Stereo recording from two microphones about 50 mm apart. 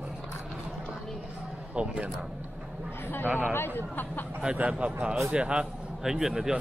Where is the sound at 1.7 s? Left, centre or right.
Right.